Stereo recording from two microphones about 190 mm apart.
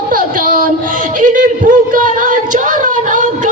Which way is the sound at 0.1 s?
50° right (ahead or behind).